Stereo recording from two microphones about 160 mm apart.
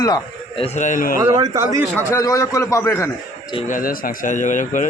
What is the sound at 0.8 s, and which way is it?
Speech, 55° left (ahead or behind).